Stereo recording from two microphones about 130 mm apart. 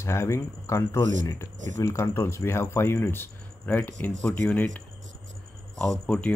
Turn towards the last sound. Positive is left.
turn(degrees=5)  # may be behind; listen again after turning